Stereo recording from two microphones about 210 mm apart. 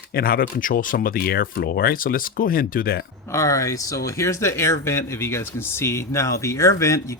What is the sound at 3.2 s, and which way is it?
Speech, 15° left (ahead or behind).